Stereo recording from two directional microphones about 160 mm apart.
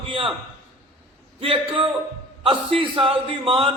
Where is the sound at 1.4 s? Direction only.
35° right (ahead or behind).